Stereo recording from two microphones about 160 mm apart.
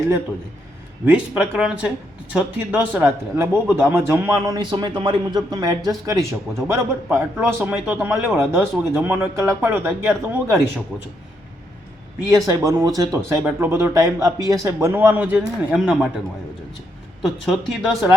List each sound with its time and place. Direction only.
1.0 s a man's voice: 5° right (ahead or behind)
12.3 s a man's voice: 20° right (ahead or behind); by 16.0 s 5° right (ahead or behind)
17.2 s speech: centre (ahead or behind)